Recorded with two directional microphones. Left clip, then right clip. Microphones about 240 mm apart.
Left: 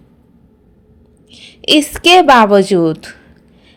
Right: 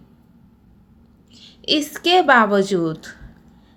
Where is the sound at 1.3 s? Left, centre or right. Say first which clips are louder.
Left 8 dB; left.